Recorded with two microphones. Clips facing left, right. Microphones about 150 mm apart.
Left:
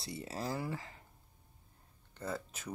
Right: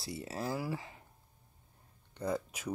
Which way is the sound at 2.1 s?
15° right (ahead or behind).